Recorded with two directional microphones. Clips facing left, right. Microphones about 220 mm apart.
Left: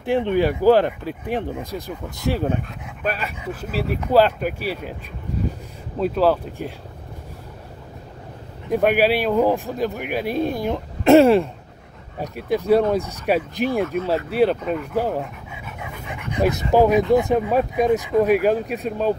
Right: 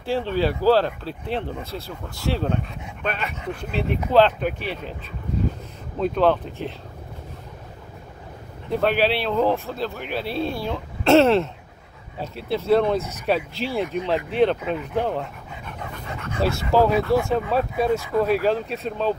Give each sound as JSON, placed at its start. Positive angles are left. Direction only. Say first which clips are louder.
{"t": 0.0, "sound": "speech", "louder": "left 4 dB", "side_deg": 20}
{"t": 5.9, "sound": "speech", "louder": "left 1 dB", "side_deg": 5}
{"t": 8.6, "sound": "speech", "louder": "left 3 dB", "side_deg": 15}
{"t": 13.9, "sound": "speech", "louder": "right 1 dB", "side_deg": 5}
{"t": 15.0, "sound": "dog", "louder": "left 2 dB", "side_deg": 5}
{"t": 16.7, "sound": "speech", "louder": "left 3 dB", "side_deg": 15}